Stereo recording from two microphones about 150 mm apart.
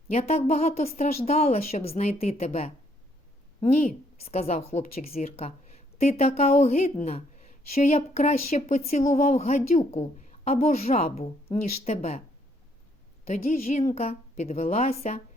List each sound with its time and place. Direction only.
0.1 s a woman's voice: 45° left (ahead or behind)
13.2 s a woman's voice: 45° left (ahead or behind)